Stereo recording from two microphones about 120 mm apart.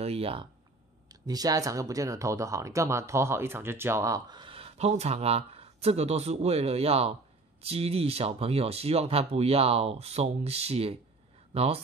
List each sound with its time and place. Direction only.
0.0 s speech: 55° right (ahead or behind)
1.0 s speech: 30° right (ahead or behind)
4.3 s speech: 45° right (ahead or behind)